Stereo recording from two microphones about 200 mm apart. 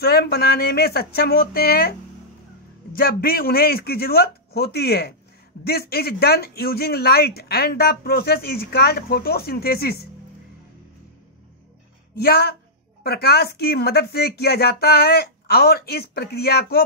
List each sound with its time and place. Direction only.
0.0 s speech: 50° left (ahead or behind)
12.2 s speech: 50° left (ahead or behind)